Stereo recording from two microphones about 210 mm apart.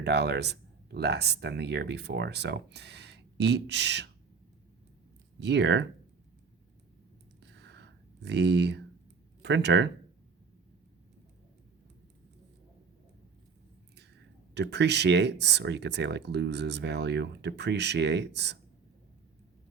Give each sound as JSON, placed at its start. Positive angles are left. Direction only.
{"t": 0.0, "sound": "speech", "side_deg": -55}
{"t": 5.4, "sound": "speech", "side_deg": -55}
{"t": 7.5, "sound": "a sound", "side_deg": -55}
{"t": 9.4, "sound": "speech", "side_deg": -55}
{"t": 14.5, "sound": "speech", "side_deg": -55}